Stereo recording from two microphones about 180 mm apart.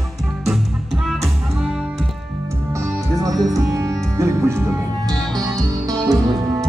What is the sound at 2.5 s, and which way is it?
Music, 15° right (ahead or behind).